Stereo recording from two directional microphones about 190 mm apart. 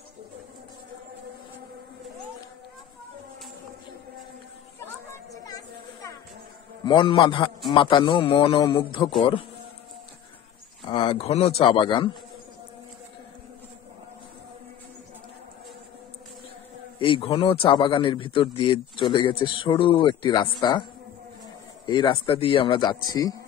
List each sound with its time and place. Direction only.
5.3 s a sound: 20° left (ahead or behind)
6.9 s speech: 25° left (ahead or behind)
10.8 s speech: 25° left (ahead or behind)
17.0 s speech: 30° left (ahead or behind)
21.8 s speech: 25° left (ahead or behind)